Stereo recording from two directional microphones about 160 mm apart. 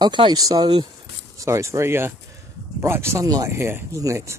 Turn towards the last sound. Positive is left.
turn(degrees=-20)  # may be behind; listen again after turning